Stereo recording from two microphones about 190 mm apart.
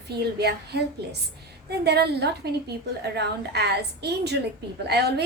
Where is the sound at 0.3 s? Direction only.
60° right (ahead or behind).